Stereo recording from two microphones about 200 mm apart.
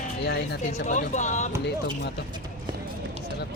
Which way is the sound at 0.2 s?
55° left (ahead or behind).